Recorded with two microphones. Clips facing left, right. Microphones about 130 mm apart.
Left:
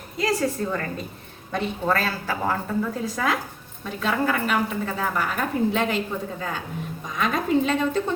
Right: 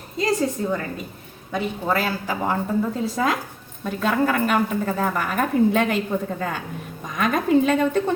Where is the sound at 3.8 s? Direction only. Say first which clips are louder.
Right 3 dB; 45° right (ahead or behind).